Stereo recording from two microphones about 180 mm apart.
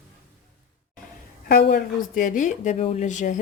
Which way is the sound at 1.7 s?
50° left (ahead or behind).